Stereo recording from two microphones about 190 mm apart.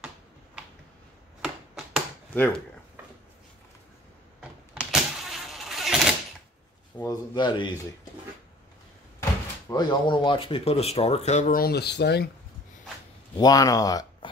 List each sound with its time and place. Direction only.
1.4 s a sound: 5° right (ahead or behind)
2.3 s speech: 10° left (ahead or behind)
4.4 s power windows: 5° right (ahead or behind)
7.1 s speech: 25° left (ahead or behind)
9.7 s speech: 25° left (ahead or behind); by 12.3 s 60° left (ahead or behind)
13.4 s speech: 20° left (ahead or behind)